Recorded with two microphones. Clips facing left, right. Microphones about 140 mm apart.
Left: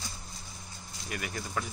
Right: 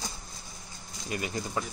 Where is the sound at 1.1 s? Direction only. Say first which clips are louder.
Right 4 dB; 25° right (ahead or behind).